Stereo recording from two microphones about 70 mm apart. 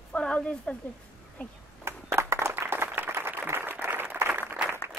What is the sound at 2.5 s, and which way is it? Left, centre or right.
Applause, right.